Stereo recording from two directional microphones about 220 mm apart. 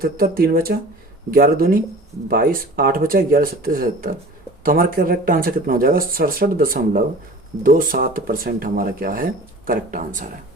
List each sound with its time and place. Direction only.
0.0 s speech: 45° right (ahead or behind)